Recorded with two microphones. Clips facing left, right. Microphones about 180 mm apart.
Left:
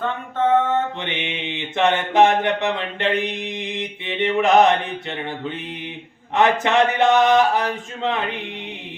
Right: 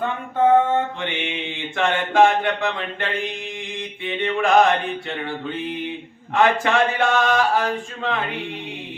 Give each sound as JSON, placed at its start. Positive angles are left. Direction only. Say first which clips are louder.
{"t": 0.0, "sound": "mantra", "louder": "right 2 dB", "side_deg": -10}
{"t": 1.0, "sound": "mantra", "louder": "right 1 dB", "side_deg": 20}
{"t": 6.3, "sound": "mantra", "louder": "left 1 dB", "side_deg": 20}